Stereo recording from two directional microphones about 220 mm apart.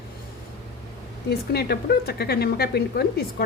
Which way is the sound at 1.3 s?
45° left (ahead or behind).